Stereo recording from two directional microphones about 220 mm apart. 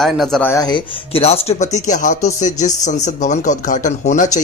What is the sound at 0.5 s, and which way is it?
Speech, 20° left (ahead or behind).